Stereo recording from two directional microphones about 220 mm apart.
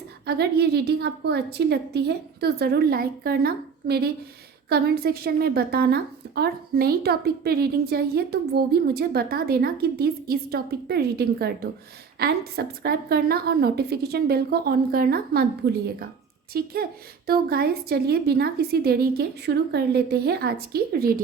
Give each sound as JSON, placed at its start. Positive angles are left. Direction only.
{"t": 0.3, "sound": "a woman's voice", "side_deg": -45}
{"t": 16.5, "sound": "a woman's voice", "side_deg": -45}